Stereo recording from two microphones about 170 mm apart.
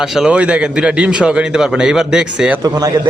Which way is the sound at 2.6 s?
20° right (ahead or behind).